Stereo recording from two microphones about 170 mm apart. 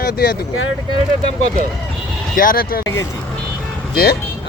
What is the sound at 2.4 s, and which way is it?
Speech, 55° left (ahead or behind).